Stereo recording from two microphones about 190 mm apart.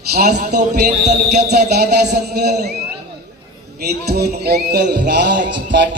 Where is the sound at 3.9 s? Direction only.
55° right (ahead or behind).